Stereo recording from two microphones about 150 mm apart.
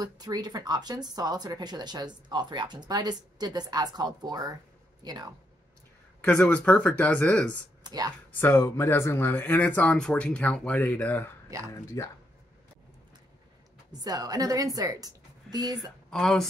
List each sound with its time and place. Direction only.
0.0 s speech: 25° right (ahead or behind)
6.2 s speech: 10° left (ahead or behind)
7.8 s a sound: 25° right (ahead or behind)
8.3 s speech: 15° left (ahead or behind)
12.0 s speech: 20° left (ahead or behind)
13.9 s speech: 25° right (ahead or behind)
16.1 s speech: 5° left (ahead or behind)